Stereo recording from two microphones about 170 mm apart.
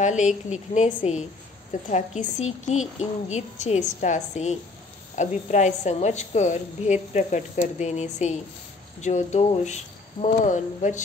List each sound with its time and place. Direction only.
0.0 s a woman's voice: 45° left (ahead or behind)